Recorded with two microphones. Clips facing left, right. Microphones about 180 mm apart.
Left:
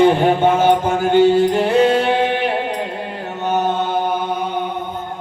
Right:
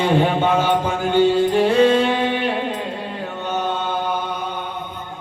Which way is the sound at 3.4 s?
50° left (ahead or behind).